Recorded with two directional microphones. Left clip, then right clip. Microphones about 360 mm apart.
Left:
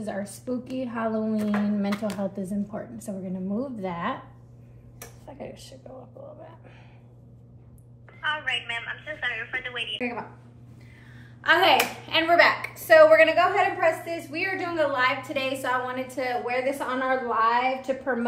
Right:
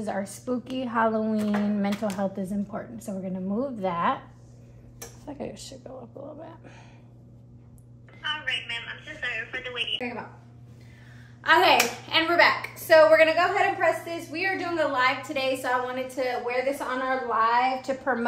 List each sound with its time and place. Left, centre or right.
0.5 s speech: centre
1.3 s a woman's voice: centre
2.1 s speech: centre
5.2 s speech: right
8.2 s a sound: centre
11.4 s a woman's voice: centre